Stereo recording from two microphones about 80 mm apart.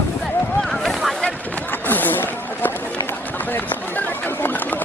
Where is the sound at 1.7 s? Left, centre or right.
Left.